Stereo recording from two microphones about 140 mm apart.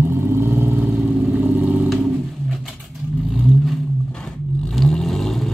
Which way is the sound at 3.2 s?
Centre (ahead or behind).